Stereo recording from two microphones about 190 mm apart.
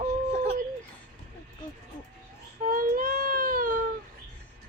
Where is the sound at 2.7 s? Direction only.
50° right (ahead or behind).